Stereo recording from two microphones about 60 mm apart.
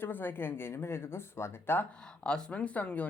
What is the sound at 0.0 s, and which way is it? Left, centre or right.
Speech, left.